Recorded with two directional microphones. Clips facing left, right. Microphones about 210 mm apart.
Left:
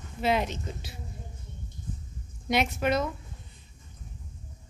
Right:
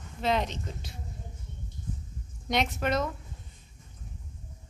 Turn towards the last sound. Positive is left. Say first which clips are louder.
# left 2 dB
turn(degrees=0)  # may be behind; listen again after turning